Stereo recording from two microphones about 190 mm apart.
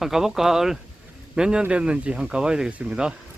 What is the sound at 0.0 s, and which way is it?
Speech, centre (ahead or behind).